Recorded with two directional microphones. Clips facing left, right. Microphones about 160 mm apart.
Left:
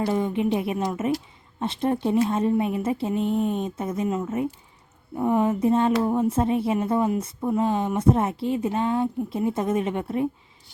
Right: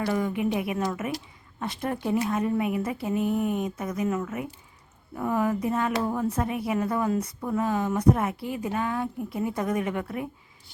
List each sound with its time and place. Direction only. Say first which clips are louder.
0.0 s speech: left 3 dB; 25° left (ahead or behind)